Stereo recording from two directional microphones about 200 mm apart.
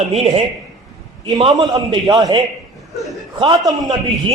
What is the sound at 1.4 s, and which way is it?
A man's voice, 25° right (ahead or behind).